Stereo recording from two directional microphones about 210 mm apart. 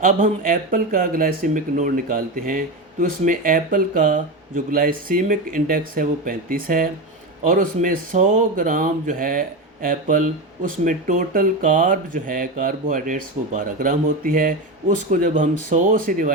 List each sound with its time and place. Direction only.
0.0 s speech: 40° right (ahead or behind)